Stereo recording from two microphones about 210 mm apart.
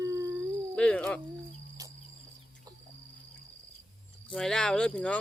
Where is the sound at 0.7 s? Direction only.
5° left (ahead or behind).